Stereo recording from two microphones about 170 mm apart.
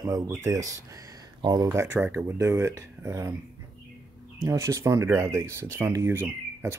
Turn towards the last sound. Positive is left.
turn(degrees=-15)  # may be behind; listen again after turning